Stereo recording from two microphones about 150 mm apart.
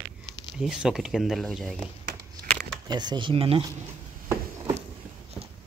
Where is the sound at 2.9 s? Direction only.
30° right (ahead or behind).